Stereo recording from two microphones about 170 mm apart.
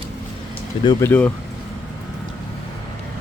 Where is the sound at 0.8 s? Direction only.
25° left (ahead or behind).